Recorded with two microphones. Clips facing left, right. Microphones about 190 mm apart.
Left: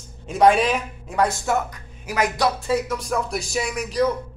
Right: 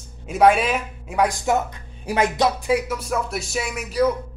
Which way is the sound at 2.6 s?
10° right (ahead or behind).